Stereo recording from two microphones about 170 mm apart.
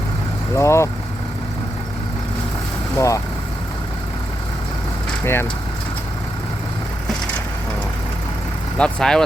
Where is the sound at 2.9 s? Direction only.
20° left (ahead or behind).